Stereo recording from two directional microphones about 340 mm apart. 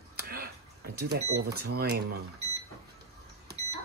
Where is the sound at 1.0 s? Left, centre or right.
Right.